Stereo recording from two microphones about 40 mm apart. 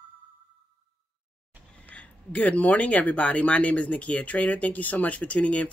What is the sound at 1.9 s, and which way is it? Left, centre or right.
Speech, left.